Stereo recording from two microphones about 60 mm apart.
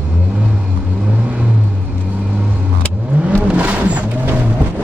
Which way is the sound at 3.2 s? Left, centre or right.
Right.